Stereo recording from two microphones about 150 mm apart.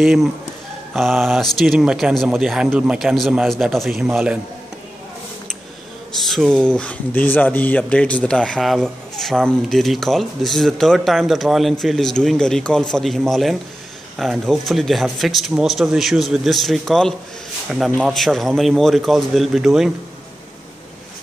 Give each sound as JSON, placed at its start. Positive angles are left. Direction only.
{"t": 0.0, "sound": "speech", "side_deg": 0}
{"t": 6.2, "sound": "speech", "side_deg": 0}